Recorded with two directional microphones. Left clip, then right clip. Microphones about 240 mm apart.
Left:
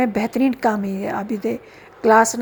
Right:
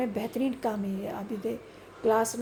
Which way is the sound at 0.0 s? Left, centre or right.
Left.